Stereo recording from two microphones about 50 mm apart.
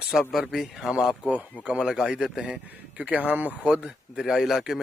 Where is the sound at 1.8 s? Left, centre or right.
Centre.